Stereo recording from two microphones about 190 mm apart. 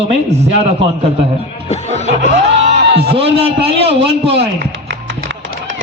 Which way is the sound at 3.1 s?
30° right (ahead or behind).